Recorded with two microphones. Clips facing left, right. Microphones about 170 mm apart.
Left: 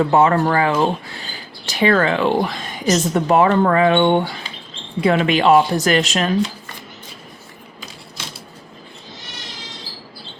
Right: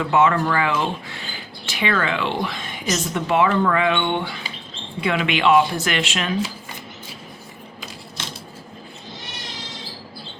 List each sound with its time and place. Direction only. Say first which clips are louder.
0.0 s speech: left 4 dB; 35° left (ahead or behind)